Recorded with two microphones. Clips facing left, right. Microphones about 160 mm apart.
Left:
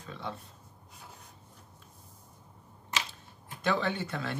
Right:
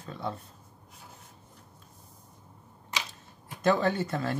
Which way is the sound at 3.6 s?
40° right (ahead or behind).